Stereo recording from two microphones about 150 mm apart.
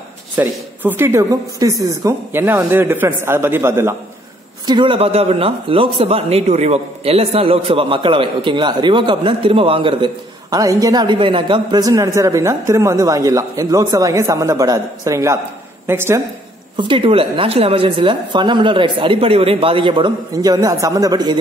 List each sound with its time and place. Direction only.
0.4 s speech: 15° right (ahead or behind)
4.6 s speech: 30° right (ahead or behind); by 16.2 s 15° right (ahead or behind)
16.7 s speech: 35° right (ahead or behind)